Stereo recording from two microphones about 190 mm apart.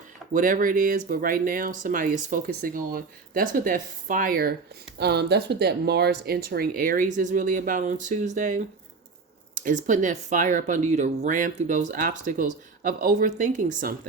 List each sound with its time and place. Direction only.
0.3 s speech: 45° right (ahead or behind)